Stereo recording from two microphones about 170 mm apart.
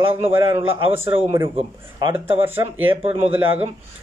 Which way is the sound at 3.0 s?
35° right (ahead or behind).